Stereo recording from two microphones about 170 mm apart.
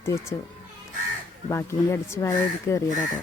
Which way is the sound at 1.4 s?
15° left (ahead or behind).